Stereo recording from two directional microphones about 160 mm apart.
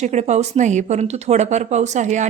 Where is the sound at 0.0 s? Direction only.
45° right (ahead or behind).